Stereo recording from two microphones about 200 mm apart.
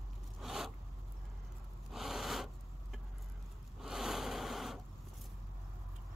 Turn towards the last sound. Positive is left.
turn(degrees=0)  # may be behind; listen again after turning